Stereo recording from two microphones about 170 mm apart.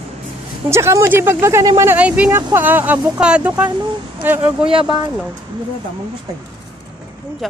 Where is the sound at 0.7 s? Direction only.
15° right (ahead or behind).